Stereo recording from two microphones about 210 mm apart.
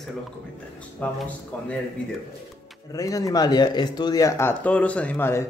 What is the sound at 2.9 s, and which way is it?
Speech, 15° left (ahead or behind).